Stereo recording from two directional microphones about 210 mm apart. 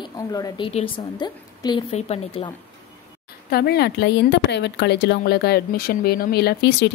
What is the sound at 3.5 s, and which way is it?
Speech, 50° left (ahead or behind).